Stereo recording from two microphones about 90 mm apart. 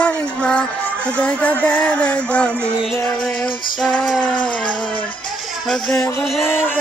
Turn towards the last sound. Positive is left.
turn(degrees=25)  # may be behind; listen again after turning